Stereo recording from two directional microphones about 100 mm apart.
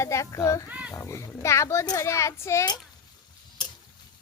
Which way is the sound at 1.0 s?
30° left (ahead or behind).